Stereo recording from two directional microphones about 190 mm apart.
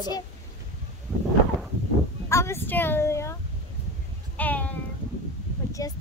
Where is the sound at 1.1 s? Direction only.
10° left (ahead or behind).